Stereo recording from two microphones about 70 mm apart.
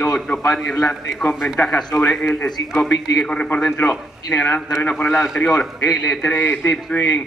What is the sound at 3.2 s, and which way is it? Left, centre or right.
A man's voice, centre.